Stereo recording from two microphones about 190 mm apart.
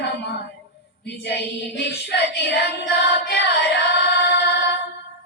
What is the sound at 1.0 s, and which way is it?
Child singing, 60° left (ahead or behind).